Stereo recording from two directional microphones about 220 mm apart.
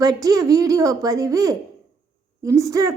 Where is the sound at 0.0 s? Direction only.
15° right (ahead or behind).